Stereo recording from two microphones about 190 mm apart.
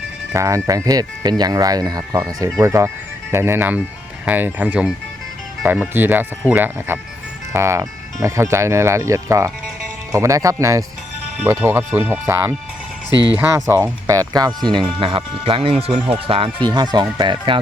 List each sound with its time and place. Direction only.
0.3 s speech: 15° right (ahead or behind)
13.1 s speech: 20° left (ahead or behind)
13.3 s speech: 15° right (ahead or behind)